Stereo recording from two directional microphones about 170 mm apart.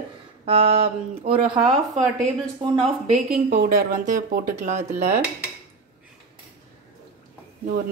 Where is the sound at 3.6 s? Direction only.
50° right (ahead or behind).